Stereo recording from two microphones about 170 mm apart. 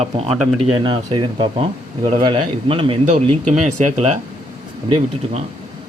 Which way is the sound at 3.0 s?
45° right (ahead or behind).